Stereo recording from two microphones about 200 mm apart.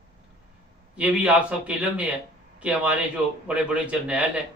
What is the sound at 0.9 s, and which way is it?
Speech, 5° right (ahead or behind).